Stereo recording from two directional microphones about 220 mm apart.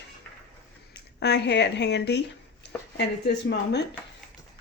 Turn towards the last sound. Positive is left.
turn(degrees=50)  # may be behind; listen again after turning